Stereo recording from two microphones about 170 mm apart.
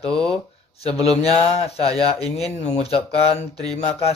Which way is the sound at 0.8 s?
35° left (ahead or behind).